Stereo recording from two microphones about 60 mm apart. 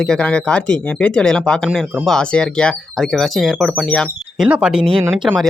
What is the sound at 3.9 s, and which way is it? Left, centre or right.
Speech, centre.